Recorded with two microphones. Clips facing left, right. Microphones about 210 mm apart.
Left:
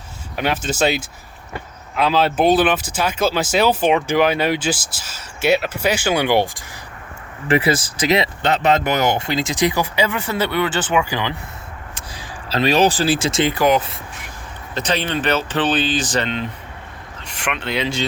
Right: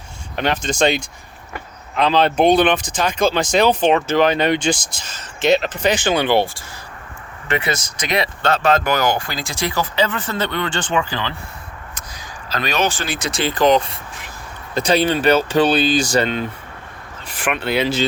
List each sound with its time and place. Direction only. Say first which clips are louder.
0.3 s speech: right 1 dB; 5° left (ahead or behind)
7.4 s speech: left 5 dB; 30° left (ahead or behind); by 11.3 s 15° left (ahead or behind)
12.5 s speech: left 5 dB; 30° left (ahead or behind)
13.5 s speech: right 7 dB; 10° left (ahead or behind)
14.8 s speech: right 5 dB; 10° right (ahead or behind)
16.2 s speech: right 3 dB; 45° right (ahead or behind)
17.2 s a sound: right 3 dB; 5° right (ahead or behind)
17.7 s speech: right 4 dB; 5° right (ahead or behind)